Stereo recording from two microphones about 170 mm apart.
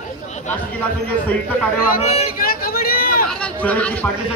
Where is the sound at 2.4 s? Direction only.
60° left (ahead or behind).